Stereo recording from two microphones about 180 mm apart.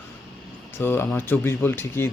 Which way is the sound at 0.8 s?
10° left (ahead or behind).